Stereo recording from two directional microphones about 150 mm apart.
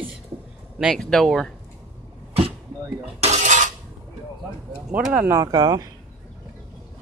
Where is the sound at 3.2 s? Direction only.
50° right (ahead or behind).